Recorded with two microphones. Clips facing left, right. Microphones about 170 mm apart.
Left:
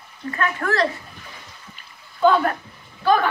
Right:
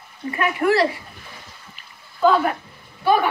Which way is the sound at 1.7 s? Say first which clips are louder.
Left 1 dB; 5° right (ahead or behind).